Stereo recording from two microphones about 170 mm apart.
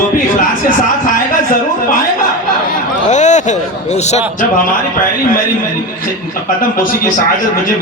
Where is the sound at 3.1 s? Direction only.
45° left (ahead or behind).